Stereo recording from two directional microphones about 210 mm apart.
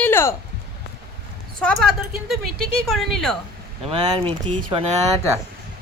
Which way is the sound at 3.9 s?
20° right (ahead or behind).